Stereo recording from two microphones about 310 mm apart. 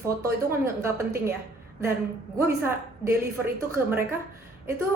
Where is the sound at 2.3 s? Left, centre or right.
Centre.